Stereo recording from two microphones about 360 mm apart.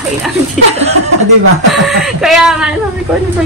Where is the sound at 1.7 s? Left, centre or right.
Centre.